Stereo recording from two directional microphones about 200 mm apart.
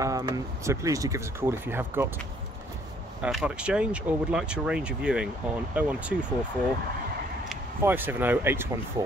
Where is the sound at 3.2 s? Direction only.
5° right (ahead or behind).